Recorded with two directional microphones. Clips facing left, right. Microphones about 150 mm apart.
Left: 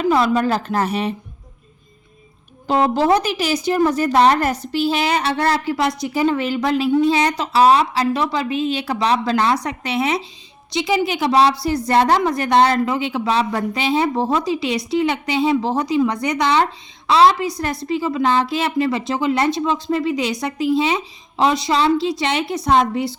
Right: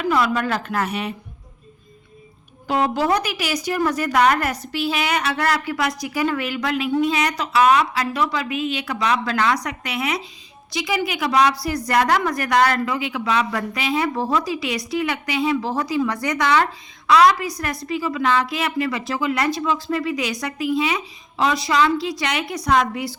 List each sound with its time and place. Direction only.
0.0 s a woman's voice: 30° left (ahead or behind)
2.6 s a woman's voice: 30° left (ahead or behind)